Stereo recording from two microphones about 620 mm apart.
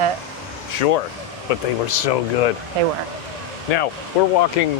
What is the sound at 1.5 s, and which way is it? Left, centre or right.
Speech, left.